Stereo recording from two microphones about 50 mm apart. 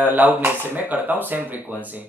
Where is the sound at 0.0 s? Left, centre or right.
Right.